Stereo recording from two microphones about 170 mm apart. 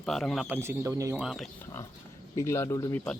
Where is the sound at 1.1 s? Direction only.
5° right (ahead or behind).